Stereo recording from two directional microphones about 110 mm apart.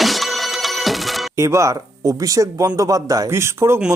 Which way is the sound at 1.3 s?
25° right (ahead or behind).